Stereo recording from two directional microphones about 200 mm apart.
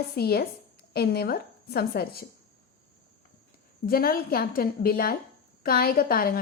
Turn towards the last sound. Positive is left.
turn(degrees=50)  # may be behind; listen again after turning